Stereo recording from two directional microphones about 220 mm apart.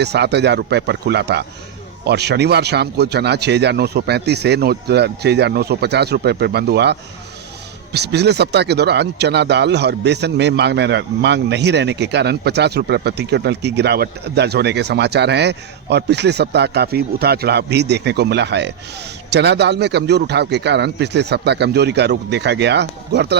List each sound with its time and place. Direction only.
0.0 s speech: 50° right (ahead or behind)
7.9 s speech: 50° right (ahead or behind)